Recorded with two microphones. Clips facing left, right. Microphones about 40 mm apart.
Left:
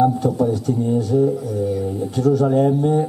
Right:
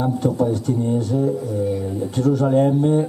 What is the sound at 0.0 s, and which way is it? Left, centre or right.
Speech, centre.